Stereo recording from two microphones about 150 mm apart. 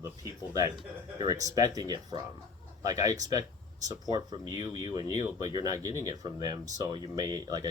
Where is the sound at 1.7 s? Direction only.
25° right (ahead or behind).